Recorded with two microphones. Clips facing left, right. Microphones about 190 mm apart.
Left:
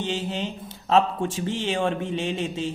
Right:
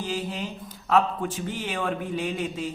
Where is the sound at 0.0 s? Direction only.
25° left (ahead or behind).